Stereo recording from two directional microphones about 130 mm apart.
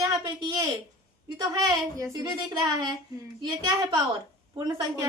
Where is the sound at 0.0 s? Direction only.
30° right (ahead or behind).